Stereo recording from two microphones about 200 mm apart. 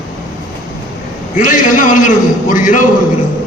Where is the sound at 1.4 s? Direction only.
40° left (ahead or behind).